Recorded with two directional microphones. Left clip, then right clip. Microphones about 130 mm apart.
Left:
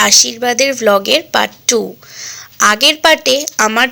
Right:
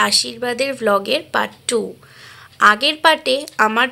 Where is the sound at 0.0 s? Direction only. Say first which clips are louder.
Left 7 dB; 25° left (ahead or behind).